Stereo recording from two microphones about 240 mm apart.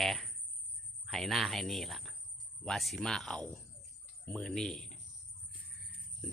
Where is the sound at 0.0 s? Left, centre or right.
Centre.